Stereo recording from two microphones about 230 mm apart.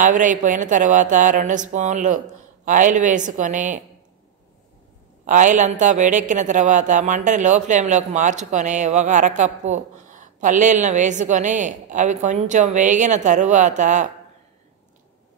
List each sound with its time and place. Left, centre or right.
0.0 s speech: right
5.2 s speech: right